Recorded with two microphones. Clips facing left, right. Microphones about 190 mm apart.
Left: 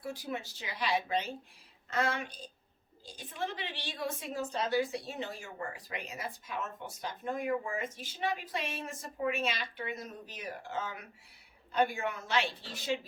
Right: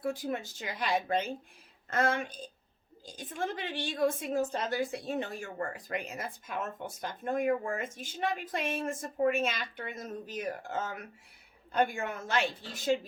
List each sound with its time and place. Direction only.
0.0 s a woman's voice: 50° right (ahead or behind)